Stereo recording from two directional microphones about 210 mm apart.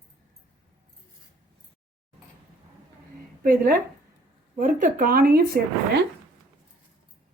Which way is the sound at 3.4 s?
40° right (ahead or behind).